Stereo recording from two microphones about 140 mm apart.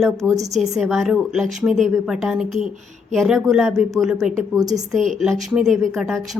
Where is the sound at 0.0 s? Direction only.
Centre (ahead or behind).